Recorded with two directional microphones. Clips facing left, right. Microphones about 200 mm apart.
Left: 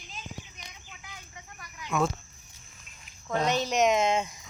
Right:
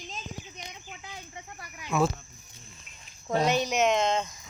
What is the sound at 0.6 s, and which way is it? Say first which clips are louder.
Chicken: right 6 dB; 30° right (ahead or behind).